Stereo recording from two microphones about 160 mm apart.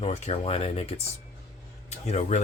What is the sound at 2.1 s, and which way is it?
Speech, 45° left (ahead or behind).